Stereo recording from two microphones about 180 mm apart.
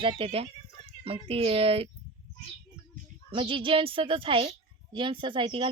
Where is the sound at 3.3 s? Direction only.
30° right (ahead or behind).